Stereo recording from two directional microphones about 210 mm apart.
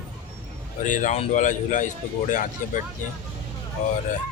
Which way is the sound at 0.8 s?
35° left (ahead or behind).